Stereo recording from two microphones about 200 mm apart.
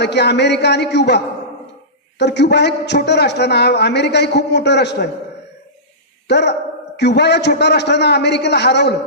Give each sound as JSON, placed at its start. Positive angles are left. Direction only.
{"t": 0.0, "sound": "a man's voice", "side_deg": 60}
{"t": 6.2, "sound": "a man's voice", "side_deg": 60}